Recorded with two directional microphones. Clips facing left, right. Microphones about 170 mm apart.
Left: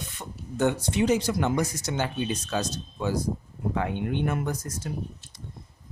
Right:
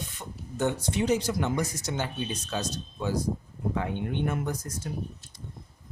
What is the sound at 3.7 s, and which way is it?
Speech, 80° left.